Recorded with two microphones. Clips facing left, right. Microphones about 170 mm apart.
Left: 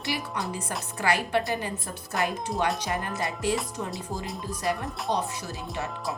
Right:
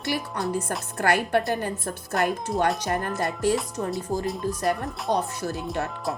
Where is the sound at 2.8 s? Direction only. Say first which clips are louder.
Right 4 dB; 45° right (ahead or behind).